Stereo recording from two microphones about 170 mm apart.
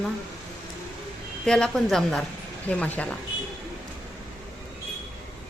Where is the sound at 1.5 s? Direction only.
5° left (ahead or behind).